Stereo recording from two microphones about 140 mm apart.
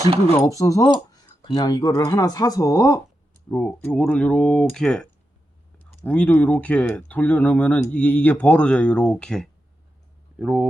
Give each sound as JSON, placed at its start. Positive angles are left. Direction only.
{"t": 0.3, "sound": "speech", "side_deg": 25}
{"t": 3.5, "sound": "speech", "side_deg": 10}
{"t": 6.1, "sound": "speech", "side_deg": 10}
{"t": 10.4, "sound": "speech", "side_deg": -5}